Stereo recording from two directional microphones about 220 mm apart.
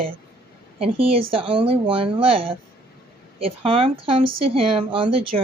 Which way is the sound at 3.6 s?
25° right (ahead or behind).